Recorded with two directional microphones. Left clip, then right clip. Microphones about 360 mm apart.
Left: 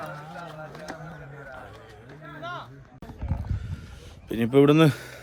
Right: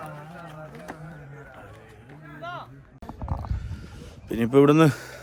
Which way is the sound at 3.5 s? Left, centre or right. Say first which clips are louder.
Even; centre.